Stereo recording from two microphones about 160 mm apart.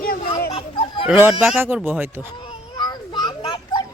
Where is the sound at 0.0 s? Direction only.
65° left (ahead or behind).